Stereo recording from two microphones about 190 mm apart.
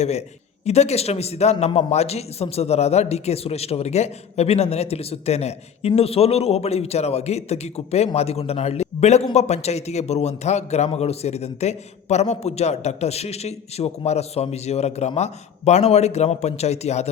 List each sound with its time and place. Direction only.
0.0 s a man's voice: 35° left (ahead or behind)